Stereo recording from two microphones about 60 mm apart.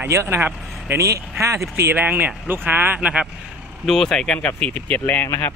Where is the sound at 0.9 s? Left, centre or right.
Right.